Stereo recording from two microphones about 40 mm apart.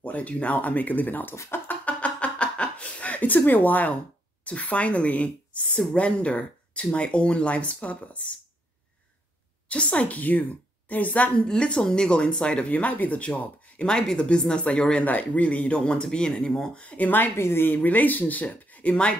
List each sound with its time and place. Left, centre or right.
0.0 s speech: left
1.9 s a sound: left
4.5 s a woman's voice: left
9.7 s a woman's voice: left
11.3 s speech: left
12.7 s a woman's voice: left
13.8 s speech: centre
15.0 s a woman's voice: left
15.8 s speech: left
16.7 s a woman's voice: left
17.4 s speech: left
17.7 s speech: left